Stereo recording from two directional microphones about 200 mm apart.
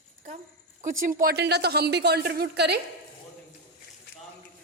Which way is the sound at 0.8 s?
40° right (ahead or behind).